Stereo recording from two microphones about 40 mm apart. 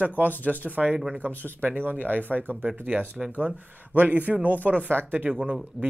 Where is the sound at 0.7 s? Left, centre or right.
Right.